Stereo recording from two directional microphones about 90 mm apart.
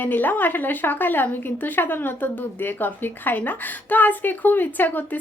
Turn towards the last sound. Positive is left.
turn(degrees=20)  # may be behind; listen again after turning